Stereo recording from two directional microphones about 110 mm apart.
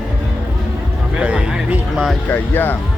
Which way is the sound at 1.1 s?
10° right (ahead or behind).